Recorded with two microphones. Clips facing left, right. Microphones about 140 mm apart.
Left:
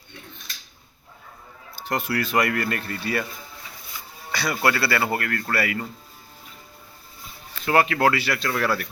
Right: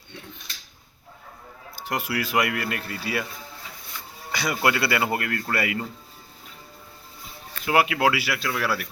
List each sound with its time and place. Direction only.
1.7 s a man's voice: 10° right (ahead or behind)
3.9 s music: 10° left (ahead or behind)
4.3 s speech: 20° right (ahead or behind)
7.6 s a man's voice: 10° right (ahead or behind)